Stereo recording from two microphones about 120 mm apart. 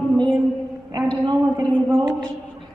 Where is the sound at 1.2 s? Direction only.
35° right (ahead or behind).